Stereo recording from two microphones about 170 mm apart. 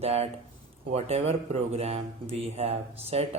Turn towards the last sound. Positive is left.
turn(degrees=-40)  # may be behind; listen again after turning